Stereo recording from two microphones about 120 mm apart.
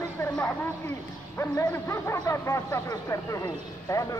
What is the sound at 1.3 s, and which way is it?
Speech, 20° left (ahead or behind).